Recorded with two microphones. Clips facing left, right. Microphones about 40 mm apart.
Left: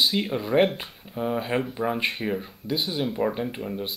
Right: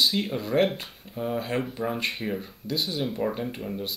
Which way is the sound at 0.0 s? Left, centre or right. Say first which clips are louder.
Left 1 dB; centre.